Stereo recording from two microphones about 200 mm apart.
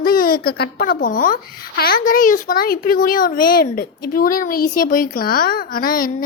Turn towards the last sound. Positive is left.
turn(degrees=45)  # may be behind; listen again after turning